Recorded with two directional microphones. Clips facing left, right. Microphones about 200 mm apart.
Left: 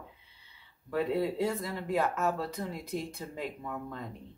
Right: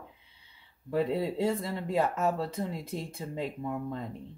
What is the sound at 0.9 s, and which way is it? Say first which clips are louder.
Speech: right 1 dB; 25° right (ahead or behind).